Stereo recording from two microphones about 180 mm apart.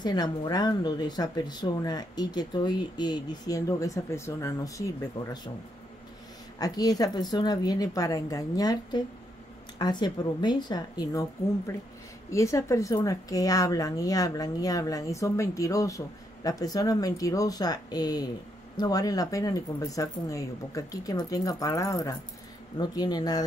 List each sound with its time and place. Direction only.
0.0 s speech: 25° left (ahead or behind)
6.6 s speech: 20° left (ahead or behind)